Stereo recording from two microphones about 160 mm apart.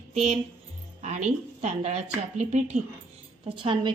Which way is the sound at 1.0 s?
45° right (ahead or behind).